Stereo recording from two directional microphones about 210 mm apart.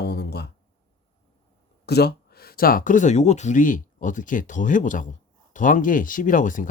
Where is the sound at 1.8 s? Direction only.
50° left (ahead or behind).